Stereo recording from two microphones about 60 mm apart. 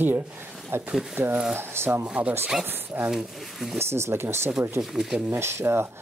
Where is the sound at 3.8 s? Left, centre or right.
Right.